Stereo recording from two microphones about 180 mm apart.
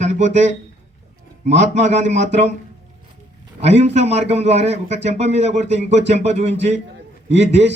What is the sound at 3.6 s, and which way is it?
A man's voice, 35° right (ahead or behind).